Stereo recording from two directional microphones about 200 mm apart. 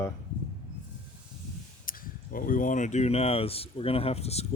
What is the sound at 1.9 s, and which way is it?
Speech, 45° left (ahead or behind).